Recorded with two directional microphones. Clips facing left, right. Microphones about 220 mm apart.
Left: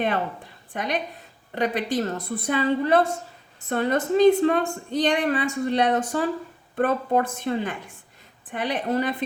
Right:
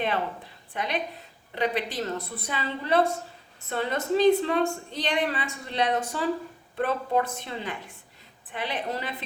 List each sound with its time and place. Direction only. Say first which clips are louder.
0.7 s a woman's voice: left 3 dB; 50° left (ahead or behind)